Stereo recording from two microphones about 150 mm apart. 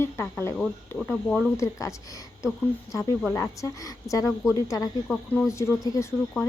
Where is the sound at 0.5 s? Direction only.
5° right (ahead or behind).